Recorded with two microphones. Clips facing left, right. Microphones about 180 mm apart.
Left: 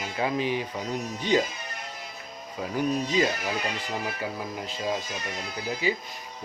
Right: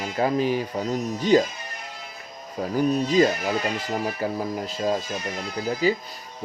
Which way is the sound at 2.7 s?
40° right (ahead or behind).